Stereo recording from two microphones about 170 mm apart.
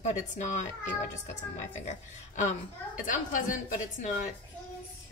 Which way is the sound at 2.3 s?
50° left (ahead or behind).